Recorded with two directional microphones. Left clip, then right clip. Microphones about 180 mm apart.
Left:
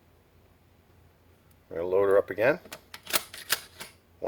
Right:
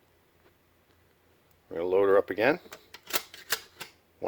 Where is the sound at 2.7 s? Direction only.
10° right (ahead or behind).